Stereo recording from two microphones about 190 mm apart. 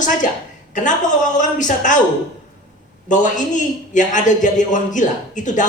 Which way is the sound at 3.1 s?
40° left (ahead or behind).